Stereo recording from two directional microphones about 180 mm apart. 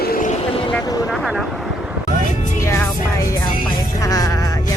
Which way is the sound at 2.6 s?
15° left (ahead or behind).